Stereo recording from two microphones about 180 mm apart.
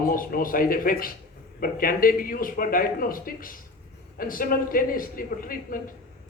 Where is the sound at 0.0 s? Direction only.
50° left (ahead or behind).